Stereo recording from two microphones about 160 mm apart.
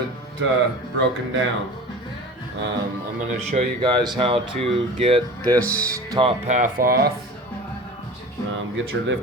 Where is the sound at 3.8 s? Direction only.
25° right (ahead or behind).